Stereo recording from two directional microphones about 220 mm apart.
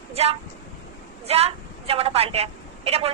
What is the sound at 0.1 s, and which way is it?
A woman's voice, 30° right (ahead or behind).